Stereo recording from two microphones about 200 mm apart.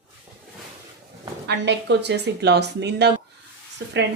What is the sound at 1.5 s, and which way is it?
Speech, 60° right (ahead or behind).